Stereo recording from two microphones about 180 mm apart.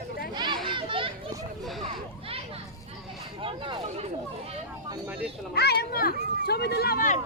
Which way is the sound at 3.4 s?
30° right (ahead or behind).